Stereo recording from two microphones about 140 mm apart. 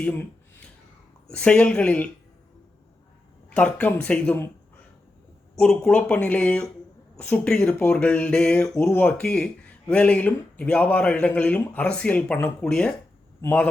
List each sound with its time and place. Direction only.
0.0 s speech: 15° left (ahead or behind)
3.5 s speech: 10° left (ahead or behind)
5.5 s speech: 5° left (ahead or behind)